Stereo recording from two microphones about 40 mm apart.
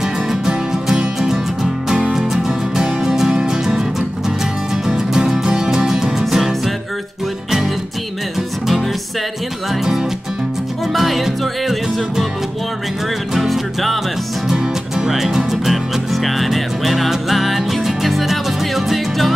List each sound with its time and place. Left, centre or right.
0.9 s music: centre
4.8 s music: centre
10.9 s music: centre
13.5 s music: centre
14.5 s music: centre
15.0 s music: centre